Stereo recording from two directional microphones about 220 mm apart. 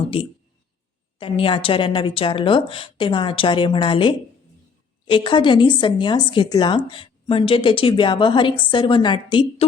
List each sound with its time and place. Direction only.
0.1 s speech: 25° left (ahead or behind)